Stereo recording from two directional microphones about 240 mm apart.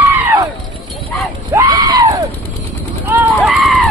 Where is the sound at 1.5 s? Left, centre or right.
Centre.